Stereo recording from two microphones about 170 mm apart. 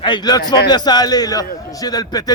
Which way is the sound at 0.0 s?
25° left (ahead or behind).